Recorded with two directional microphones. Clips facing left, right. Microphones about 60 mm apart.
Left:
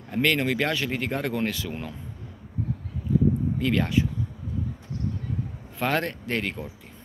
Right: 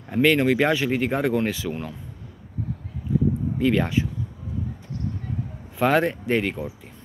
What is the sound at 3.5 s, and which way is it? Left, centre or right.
Speech, centre.